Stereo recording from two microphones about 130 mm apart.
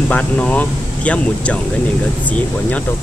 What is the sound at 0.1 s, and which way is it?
A man's voice, 10° left (ahead or behind).